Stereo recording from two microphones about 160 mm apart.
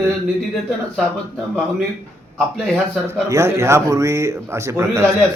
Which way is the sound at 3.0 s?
15° right (ahead or behind).